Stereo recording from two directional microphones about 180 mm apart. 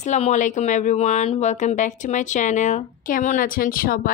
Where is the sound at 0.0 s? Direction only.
40° left (ahead or behind).